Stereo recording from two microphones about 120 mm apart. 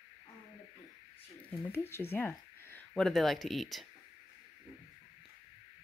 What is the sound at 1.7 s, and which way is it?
Speech, 20° left (ahead or behind).